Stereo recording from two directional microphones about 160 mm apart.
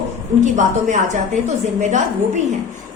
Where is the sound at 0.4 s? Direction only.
50° right (ahead or behind).